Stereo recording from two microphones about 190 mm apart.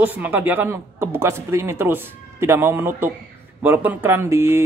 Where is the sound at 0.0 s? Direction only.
10° right (ahead or behind).